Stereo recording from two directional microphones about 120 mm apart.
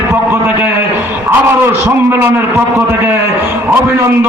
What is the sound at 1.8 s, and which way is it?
A man's voice, 15° right (ahead or behind).